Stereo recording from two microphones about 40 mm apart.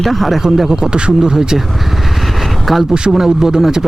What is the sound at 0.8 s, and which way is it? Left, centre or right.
Speech, right.